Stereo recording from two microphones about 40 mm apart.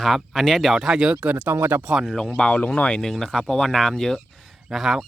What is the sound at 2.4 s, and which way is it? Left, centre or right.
Speech, left.